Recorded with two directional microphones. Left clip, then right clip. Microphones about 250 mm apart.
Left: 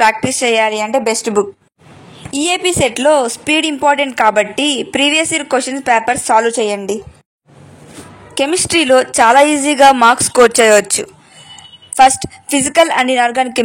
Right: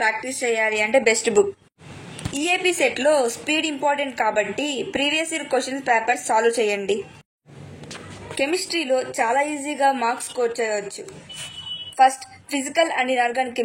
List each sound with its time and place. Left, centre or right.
0.0 s a woman's voice: left
2.3 s a woman's voice: left
8.4 s a woman's voice: left